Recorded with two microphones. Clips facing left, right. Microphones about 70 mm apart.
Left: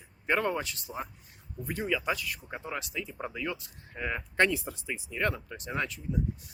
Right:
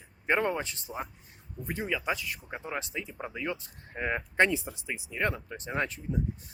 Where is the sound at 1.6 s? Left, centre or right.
Centre.